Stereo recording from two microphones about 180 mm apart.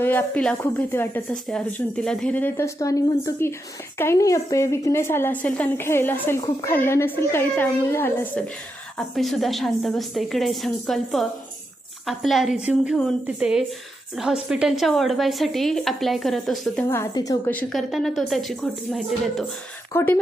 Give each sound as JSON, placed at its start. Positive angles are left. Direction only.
{"t": 0.0, "sound": "a woman's voice", "side_deg": 10}
{"t": 16.9, "sound": "a woman's voice", "side_deg": 15}
{"t": 17.5, "sound": "a woman's voice", "side_deg": 5}
{"t": 19.9, "sound": "a woman's voice", "side_deg": 15}